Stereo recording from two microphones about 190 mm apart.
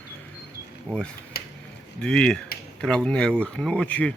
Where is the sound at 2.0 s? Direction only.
5° left (ahead or behind).